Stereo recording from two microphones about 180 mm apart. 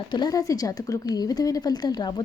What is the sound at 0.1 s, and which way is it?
A woman's voice, 20° left (ahead or behind).